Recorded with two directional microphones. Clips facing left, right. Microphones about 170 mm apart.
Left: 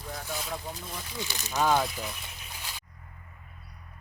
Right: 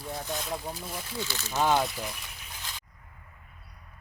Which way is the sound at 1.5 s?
15° right (ahead or behind).